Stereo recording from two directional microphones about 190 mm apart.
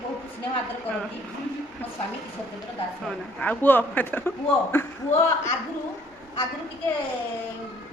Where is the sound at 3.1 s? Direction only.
10° left (ahead or behind).